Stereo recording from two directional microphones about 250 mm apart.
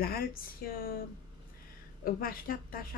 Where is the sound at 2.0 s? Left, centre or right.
Left.